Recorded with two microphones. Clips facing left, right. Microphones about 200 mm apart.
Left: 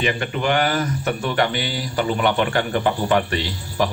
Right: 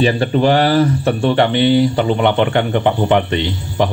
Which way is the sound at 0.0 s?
35° right (ahead or behind).